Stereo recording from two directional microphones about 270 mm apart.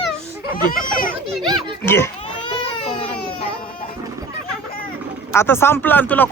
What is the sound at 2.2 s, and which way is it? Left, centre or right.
Baby cry, centre.